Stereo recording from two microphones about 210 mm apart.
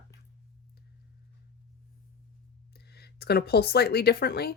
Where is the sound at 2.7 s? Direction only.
50° left (ahead or behind).